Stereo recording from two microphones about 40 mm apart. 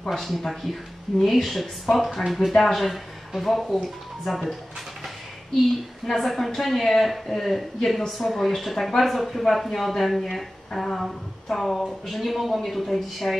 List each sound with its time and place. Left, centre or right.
0.1 s speech: centre
6.0 s speech: centre